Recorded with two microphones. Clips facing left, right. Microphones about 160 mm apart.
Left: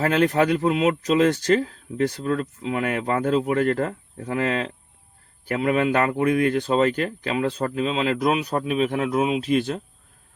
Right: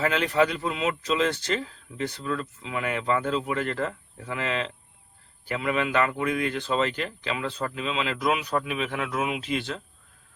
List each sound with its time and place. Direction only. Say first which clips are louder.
0.0 s speech: left 4 dB; 50° left (ahead or behind); by 9.4 s 30° left (ahead or behind)
9.4 s speech: left 8 dB; 45° left (ahead or behind)